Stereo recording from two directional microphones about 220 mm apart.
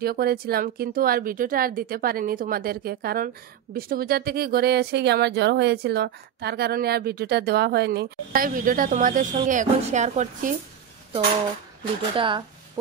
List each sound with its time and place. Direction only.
0.0 s speech: 45° right (ahead or behind)
12.2 s speech: 20° right (ahead or behind)